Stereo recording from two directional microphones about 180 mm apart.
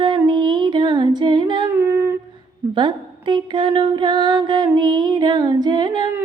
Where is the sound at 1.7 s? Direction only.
10° right (ahead or behind).